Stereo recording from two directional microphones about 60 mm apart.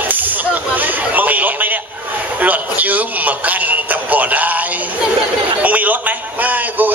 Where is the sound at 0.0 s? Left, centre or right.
Right.